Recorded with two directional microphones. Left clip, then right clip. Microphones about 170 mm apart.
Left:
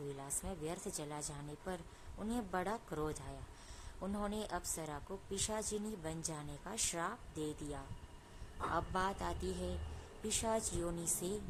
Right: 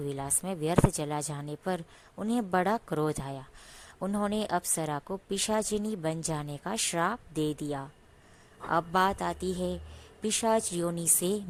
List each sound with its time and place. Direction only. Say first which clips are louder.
0.2 s a woman's voice: right 12 dB; 45° right (ahead or behind)